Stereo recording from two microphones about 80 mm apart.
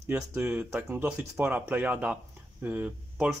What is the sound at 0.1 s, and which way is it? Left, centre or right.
Speech, right.